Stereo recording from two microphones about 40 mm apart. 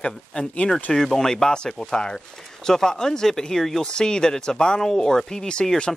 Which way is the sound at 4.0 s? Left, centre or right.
Centre.